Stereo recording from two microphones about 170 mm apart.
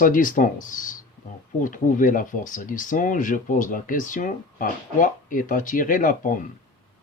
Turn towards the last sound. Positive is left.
turn(degrees=50)  # may be behind; listen again after turning